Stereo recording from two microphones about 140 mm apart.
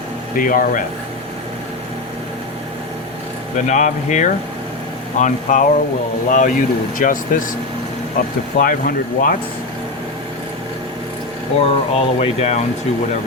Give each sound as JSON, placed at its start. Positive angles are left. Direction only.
{"t": 0.3, "sound": "speech", "side_deg": 80}
{"t": 3.7, "sound": "speech", "side_deg": 60}
{"t": 8.5, "sound": "speech", "side_deg": 75}
{"t": 11.6, "sound": "speech", "side_deg": 45}